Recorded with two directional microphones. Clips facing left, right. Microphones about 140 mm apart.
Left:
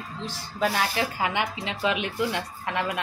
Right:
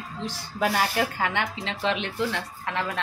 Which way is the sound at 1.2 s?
15° left (ahead or behind).